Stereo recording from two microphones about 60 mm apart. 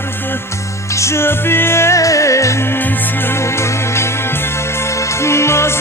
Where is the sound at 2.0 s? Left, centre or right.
Left.